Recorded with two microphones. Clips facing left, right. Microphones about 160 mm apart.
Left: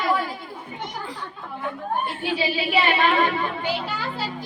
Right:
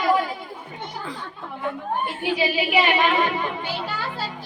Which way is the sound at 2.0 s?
15° right (ahead or behind).